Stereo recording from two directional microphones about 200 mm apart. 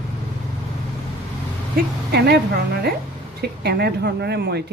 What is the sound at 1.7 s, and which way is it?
Speech, 55° right (ahead or behind).